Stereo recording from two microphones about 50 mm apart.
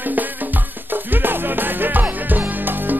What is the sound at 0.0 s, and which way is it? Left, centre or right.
Music, right.